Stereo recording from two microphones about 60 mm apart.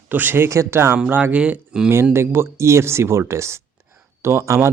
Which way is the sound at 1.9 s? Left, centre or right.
Right.